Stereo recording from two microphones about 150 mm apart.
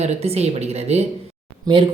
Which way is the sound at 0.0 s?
45° right (ahead or behind).